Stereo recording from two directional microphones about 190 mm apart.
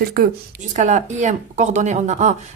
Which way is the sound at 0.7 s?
40° right (ahead or behind).